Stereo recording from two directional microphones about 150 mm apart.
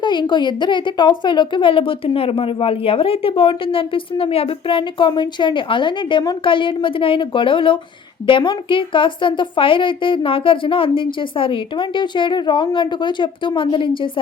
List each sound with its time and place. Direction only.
0.0 s a woman's voice: 30° left (ahead or behind)